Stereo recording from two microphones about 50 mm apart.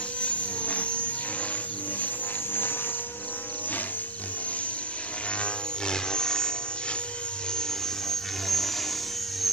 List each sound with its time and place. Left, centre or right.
0.2 s helicopter: left
5.4 s a sound: centre
8.1 s music: centre